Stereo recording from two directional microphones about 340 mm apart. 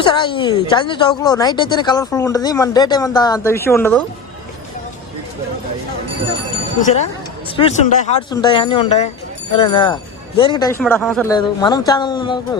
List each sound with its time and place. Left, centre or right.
0.0 s speech: centre
6.8 s speech: centre